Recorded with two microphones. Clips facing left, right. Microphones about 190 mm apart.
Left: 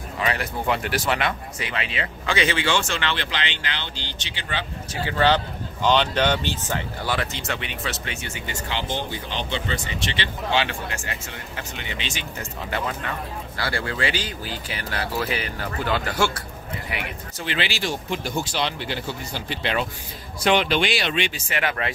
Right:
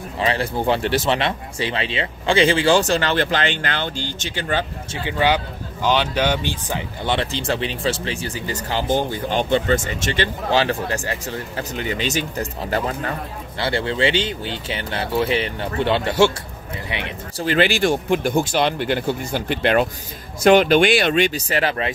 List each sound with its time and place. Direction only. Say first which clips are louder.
0.2 s speech: right 5 dB; 30° right (ahead or behind); by 4.6 s 45° right (ahead or behind)
5.0 s speech: right 1 dB; 10° right (ahead or behind)
7.1 s speech: right 6 dB; 30° right (ahead or behind)
13.6 s speech: right 6 dB; 25° right (ahead or behind)
17.5 s speech: right 10 dB; 50° right (ahead or behind); by 21.9 s 30° right (ahead or behind)